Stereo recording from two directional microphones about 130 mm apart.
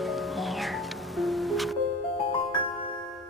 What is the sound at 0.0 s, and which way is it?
Music, centre (ahead or behind).